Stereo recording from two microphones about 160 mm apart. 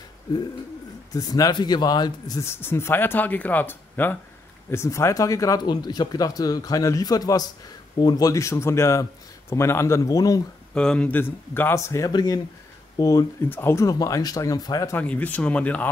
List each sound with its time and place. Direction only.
1.1 s speech: 25° left (ahead or behind)
10.7 s speech: 5° left (ahead or behind)